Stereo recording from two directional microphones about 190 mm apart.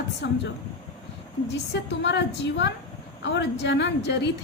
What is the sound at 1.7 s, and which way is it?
A woman's voice, 65° left (ahead or behind).